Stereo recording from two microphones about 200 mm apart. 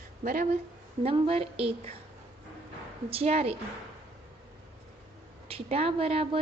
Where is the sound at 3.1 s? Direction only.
30° right (ahead or behind).